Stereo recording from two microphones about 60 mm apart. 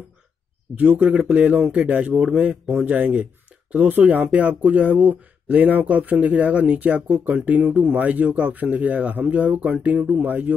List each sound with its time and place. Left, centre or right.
0.7 s speech: right